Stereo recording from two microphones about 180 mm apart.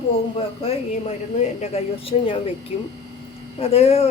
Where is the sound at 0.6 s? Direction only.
35° left (ahead or behind).